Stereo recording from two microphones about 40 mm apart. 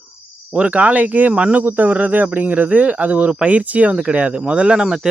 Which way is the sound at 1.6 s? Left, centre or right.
Right.